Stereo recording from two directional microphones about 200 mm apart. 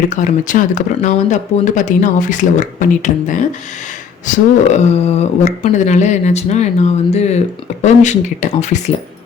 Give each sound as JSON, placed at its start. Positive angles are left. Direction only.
{"t": 0.1, "sound": "speech", "side_deg": 40}